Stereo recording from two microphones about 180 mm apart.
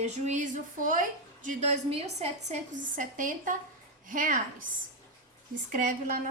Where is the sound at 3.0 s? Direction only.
45° right (ahead or behind).